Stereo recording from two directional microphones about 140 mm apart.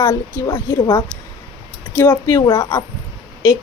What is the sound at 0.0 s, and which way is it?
A woman's voice, 25° left (ahead or behind).